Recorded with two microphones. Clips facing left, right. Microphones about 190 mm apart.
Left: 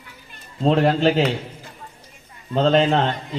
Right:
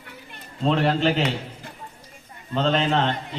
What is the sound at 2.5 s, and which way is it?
Speech, 35° left (ahead or behind).